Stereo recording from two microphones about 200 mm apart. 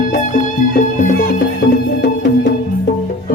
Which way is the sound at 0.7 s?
45° left (ahead or behind).